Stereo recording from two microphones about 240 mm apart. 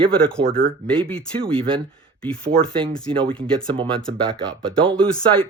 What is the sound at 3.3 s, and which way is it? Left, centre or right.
Speech, centre.